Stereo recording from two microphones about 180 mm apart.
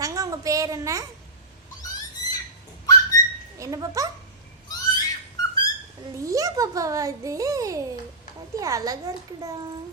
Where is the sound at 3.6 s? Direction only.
20° right (ahead or behind).